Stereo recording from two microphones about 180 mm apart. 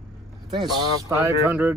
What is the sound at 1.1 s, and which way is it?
Speech, 15° right (ahead or behind).